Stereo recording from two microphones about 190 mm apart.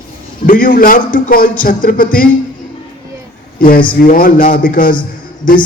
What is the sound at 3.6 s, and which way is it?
A man's voice, 50° left (ahead or behind).